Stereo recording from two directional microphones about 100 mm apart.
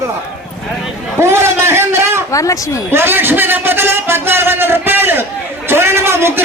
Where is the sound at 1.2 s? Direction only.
25° right (ahead or behind).